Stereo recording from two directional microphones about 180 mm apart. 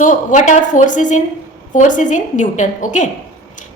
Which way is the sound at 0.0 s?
45° left (ahead or behind).